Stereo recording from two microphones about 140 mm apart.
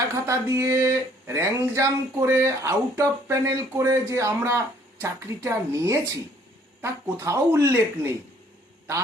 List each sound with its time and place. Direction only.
0.1 s speech: 20° right (ahead or behind)